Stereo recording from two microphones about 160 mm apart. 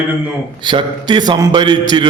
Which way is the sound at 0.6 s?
30° right (ahead or behind).